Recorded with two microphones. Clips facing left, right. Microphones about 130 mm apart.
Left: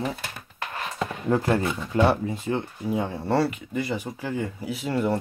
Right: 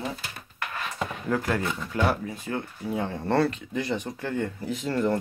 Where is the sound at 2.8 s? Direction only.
10° left (ahead or behind).